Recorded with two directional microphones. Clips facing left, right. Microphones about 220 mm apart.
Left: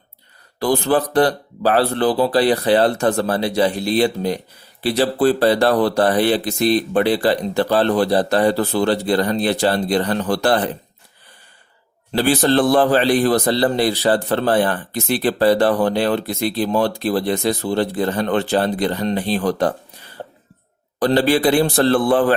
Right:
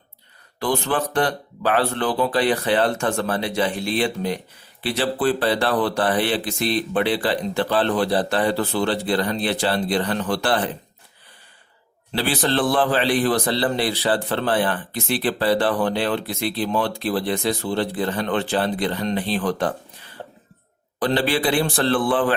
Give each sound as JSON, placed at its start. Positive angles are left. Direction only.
{"t": 0.6, "sound": "a man's voice", "side_deg": 35}
{"t": 12.1, "sound": "a man's voice", "side_deg": 45}
{"t": 20.2, "sound": "cough", "side_deg": 45}
{"t": 21.0, "sound": "a man's voice", "side_deg": 40}